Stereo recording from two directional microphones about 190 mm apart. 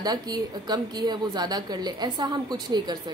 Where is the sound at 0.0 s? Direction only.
20° right (ahead or behind).